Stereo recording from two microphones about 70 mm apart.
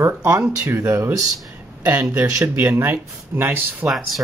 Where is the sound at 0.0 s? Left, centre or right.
Right.